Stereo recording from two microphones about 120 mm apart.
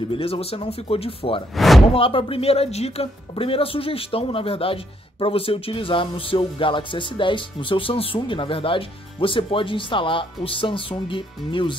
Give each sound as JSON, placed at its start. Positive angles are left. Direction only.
{"t": 0.1, "sound": "speech", "side_deg": 50}
{"t": 1.5, "sound": "speech", "side_deg": 0}
{"t": 1.9, "sound": "speech", "side_deg": 50}